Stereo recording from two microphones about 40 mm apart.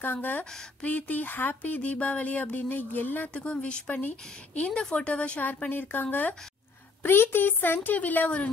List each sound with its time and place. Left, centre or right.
0.0 s speech: left
3.3 s speech: left
5.7 s speech: left
6.0 s speech: left
7.0 s speech: left